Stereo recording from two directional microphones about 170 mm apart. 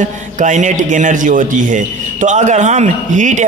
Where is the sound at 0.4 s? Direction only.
45° right (ahead or behind).